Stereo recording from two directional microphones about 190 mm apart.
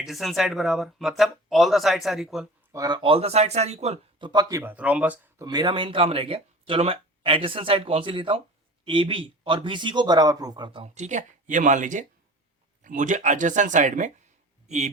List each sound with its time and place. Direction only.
0.0 s speech: centre (ahead or behind)
2.7 s speech: 20° right (ahead or behind)
4.3 s speech: 20° right (ahead or behind)
5.5 s speech: 20° right (ahead or behind); by 14.1 s 40° right (ahead or behind)